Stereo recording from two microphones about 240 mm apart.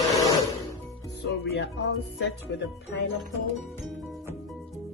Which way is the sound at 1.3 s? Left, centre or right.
Left.